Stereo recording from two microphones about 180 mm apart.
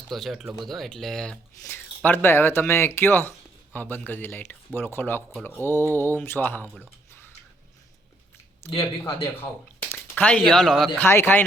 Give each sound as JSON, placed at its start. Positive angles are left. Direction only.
{"t": 0.1, "sound": "speech", "side_deg": 0}
{"t": 8.6, "sound": "speech", "side_deg": 30}
{"t": 9.9, "sound": "speech", "side_deg": 10}
{"t": 11.0, "sound": "speech", "side_deg": 10}